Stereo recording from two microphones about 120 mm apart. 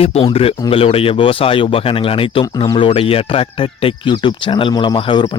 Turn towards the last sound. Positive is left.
turn(degrees=45)  # may be behind; listen again after turning